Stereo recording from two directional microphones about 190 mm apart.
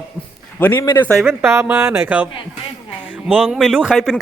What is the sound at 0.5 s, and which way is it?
Speech, 10° left (ahead or behind).